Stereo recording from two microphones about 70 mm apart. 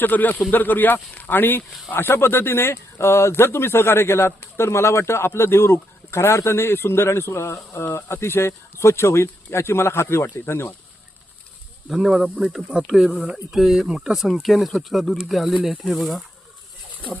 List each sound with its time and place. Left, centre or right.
0.0 s speech: left
11.9 s speech: centre